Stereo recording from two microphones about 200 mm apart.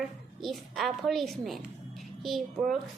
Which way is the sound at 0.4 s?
Centre (ahead or behind).